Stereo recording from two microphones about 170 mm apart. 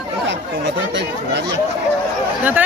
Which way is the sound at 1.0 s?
90° right.